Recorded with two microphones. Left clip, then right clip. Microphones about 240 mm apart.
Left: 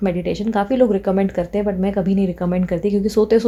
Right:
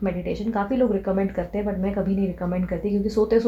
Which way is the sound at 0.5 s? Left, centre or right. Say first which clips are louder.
Left 6 dB; left.